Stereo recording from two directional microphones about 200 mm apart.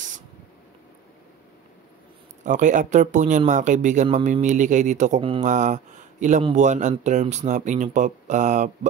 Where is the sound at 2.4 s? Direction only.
40° right (ahead or behind).